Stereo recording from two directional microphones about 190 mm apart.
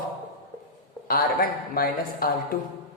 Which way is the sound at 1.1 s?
50° left (ahead or behind).